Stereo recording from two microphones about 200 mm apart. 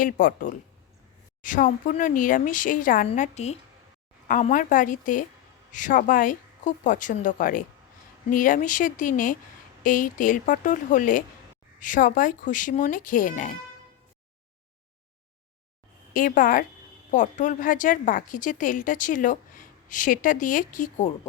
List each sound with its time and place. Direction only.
0.0 s a woman's voice: 45° left (ahead or behind)
16.1 s a woman's voice: 40° left (ahead or behind)